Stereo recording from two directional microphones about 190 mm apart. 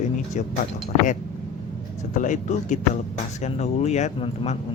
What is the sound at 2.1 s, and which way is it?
Speech, 40° left (ahead or behind).